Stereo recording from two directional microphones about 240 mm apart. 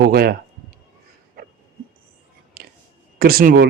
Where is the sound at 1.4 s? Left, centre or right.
Right.